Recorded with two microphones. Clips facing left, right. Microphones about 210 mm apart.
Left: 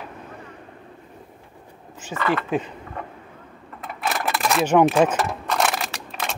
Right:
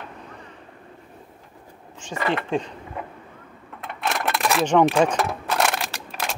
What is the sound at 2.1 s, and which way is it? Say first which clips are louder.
Speech: left 1 dB; 25° right (ahead or behind).